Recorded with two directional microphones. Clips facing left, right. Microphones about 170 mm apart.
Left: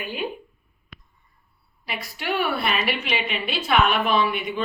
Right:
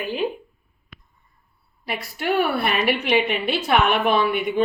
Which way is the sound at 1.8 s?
50° right (ahead or behind).